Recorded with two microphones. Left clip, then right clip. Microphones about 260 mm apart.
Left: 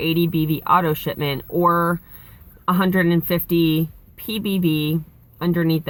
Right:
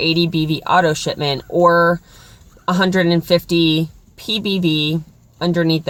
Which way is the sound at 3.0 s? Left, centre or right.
Right.